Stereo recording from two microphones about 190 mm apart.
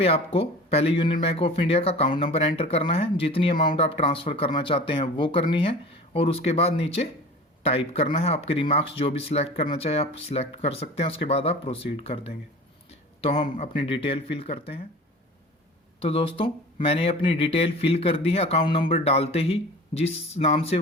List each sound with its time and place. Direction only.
0.0 s speech: 30° left (ahead or behind)
16.0 s speech: 30° left (ahead or behind)